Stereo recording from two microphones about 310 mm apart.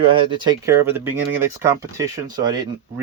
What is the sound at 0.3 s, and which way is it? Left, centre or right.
Speech, centre.